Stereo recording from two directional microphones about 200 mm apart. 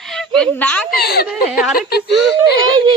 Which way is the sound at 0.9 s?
50° left (ahead or behind).